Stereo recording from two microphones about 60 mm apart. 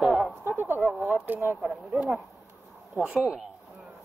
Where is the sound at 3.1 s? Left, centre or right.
Centre.